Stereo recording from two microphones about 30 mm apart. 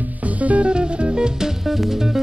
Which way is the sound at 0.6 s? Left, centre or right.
Right.